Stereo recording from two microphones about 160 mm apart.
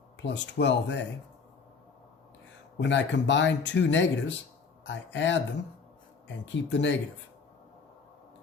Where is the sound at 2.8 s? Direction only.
90° left.